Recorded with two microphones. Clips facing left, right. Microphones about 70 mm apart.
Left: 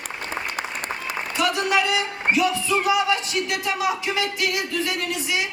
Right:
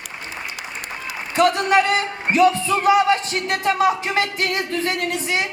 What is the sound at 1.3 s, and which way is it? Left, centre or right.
A man's voice, right.